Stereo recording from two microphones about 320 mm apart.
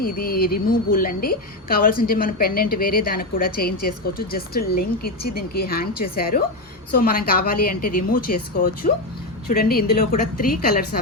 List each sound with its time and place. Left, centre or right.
0.0 s a woman's voice: left